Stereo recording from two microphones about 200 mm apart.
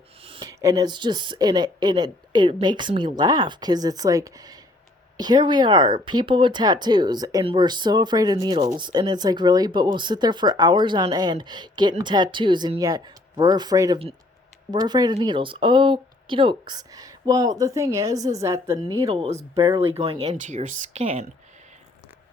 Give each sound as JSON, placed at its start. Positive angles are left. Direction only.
{"t": 0.2, "sound": "speech", "side_deg": -25}
{"t": 19.1, "sound": "speech", "side_deg": -30}
{"t": 19.5, "sound": "speech", "side_deg": -15}
{"t": 19.9, "sound": "speech", "side_deg": -25}